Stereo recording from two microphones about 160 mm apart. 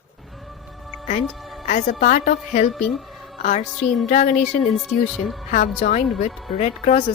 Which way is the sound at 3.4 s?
50° left (ahead or behind).